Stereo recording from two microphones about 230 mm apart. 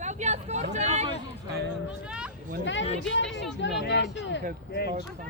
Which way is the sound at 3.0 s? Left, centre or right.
Left.